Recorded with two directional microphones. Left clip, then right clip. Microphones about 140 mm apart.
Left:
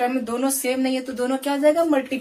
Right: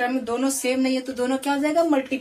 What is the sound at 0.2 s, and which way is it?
Speech, 30° right (ahead or behind).